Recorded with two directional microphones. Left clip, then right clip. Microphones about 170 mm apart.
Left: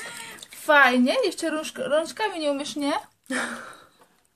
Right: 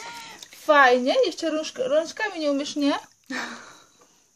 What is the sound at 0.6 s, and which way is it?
A woman's voice, 20° right (ahead or behind).